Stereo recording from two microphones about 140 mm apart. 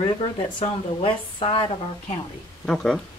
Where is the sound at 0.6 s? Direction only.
40° left (ahead or behind).